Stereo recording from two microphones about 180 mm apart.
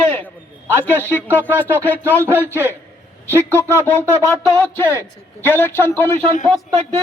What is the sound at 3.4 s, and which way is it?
Speech, 10° left (ahead or behind).